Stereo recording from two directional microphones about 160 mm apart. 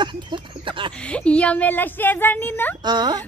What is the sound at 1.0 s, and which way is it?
Speech, 5° left (ahead or behind).